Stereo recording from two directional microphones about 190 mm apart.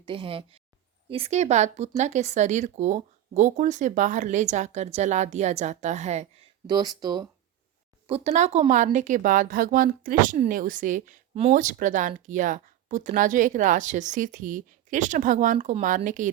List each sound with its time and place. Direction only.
0.0 s speech: 30° right (ahead or behind)
6.7 s speech: 20° right (ahead or behind)
8.0 s speech: 35° right (ahead or behind)